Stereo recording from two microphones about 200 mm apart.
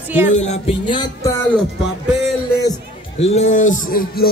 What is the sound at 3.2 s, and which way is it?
Speech, 35° left (ahead or behind).